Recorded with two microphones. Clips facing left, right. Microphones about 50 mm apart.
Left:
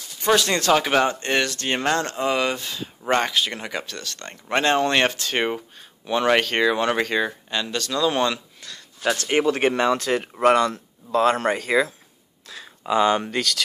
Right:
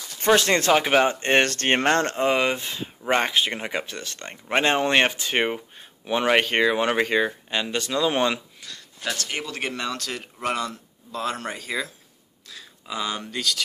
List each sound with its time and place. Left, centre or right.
0.4 s speech: right
0.7 s speech: centre
1.2 s speech: right
8.5 s a sound: centre
9.0 s speech: left
10.4 s a man's voice: left
12.4 s speech: left